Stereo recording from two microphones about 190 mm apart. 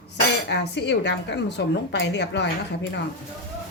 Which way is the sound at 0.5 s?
65° left (ahead or behind).